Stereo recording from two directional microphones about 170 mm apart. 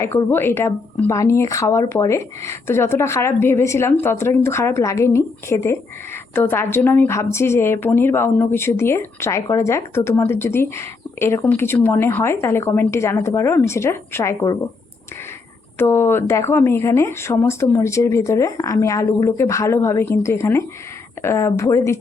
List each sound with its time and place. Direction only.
0.0 s a woman's voice: 15° left (ahead or behind)
15.8 s a woman's voice: 15° left (ahead or behind)